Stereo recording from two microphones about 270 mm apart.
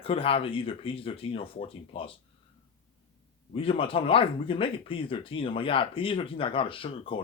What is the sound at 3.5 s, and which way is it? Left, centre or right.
Speech, centre.